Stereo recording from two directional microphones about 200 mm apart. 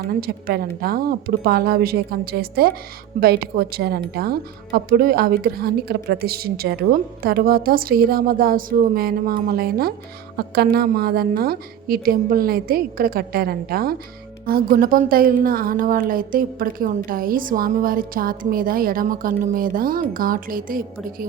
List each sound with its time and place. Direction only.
0.1 s a woman's voice: 50° right (ahead or behind)